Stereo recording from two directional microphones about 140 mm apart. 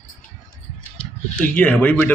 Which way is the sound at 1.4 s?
10° left (ahead or behind).